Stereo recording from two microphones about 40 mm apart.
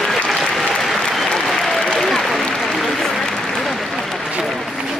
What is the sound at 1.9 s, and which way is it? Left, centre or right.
Applause, centre.